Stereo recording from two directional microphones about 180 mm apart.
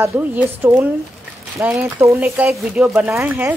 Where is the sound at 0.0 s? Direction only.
10° right (ahead or behind).